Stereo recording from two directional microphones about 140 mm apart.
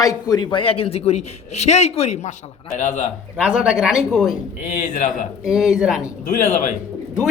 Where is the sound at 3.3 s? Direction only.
5° right (ahead or behind).